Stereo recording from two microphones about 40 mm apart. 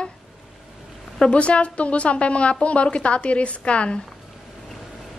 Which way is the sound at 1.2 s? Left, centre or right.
Left.